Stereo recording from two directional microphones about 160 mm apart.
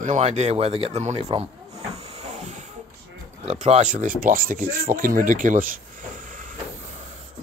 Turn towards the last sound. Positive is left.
turn(degrees=-55)  # may be behind; listen again after turning